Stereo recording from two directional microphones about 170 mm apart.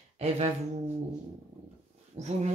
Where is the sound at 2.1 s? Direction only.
40° right (ahead or behind).